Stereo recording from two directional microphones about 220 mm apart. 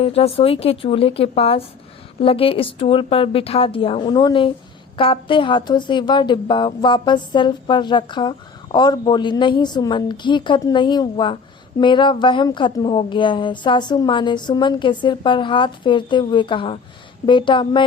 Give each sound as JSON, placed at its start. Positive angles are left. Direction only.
{"t": 0.0, "sound": "speech", "side_deg": 25}